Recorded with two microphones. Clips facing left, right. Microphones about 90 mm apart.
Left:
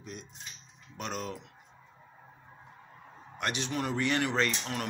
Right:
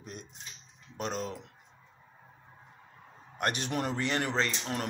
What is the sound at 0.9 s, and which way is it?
Speech, 35° right (ahead or behind).